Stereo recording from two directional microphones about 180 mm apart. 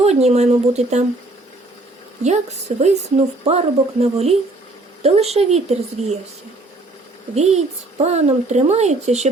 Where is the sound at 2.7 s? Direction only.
40° right (ahead or behind).